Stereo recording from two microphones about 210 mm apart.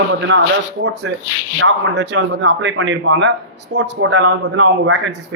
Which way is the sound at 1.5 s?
65° right (ahead or behind).